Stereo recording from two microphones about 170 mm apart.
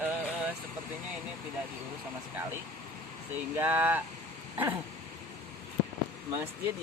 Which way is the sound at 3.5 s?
10° right (ahead or behind).